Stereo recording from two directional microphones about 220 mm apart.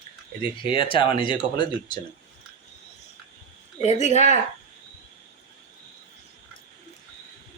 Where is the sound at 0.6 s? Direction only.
25° left (ahead or behind).